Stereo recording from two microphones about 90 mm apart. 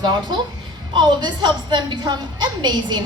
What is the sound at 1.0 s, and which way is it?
A woman's voice, 55° right (ahead or behind).